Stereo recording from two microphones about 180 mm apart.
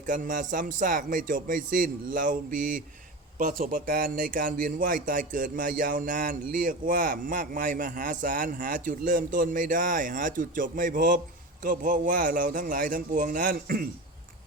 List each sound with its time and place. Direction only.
0.1 s speech: 45° right (ahead or behind)